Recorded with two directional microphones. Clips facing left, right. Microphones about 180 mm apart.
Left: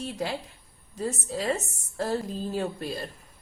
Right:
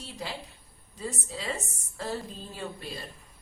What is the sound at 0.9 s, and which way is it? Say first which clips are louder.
Speech: left 6 dB; 45° left (ahead or behind).